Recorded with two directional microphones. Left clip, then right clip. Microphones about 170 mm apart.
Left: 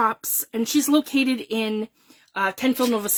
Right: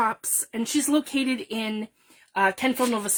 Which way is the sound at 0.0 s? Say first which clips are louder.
Left 3 dB; 40° left (ahead or behind).